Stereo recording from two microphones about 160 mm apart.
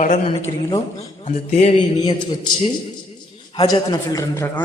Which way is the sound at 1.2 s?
45° left (ahead or behind).